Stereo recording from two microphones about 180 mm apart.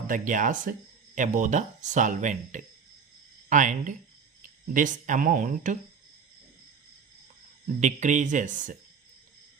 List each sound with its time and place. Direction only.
0.1 s speech: 45° right (ahead or behind)
7.8 s speech: 40° right (ahead or behind)